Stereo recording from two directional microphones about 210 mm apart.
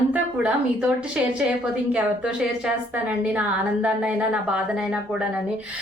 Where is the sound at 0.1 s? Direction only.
5° right (ahead or behind).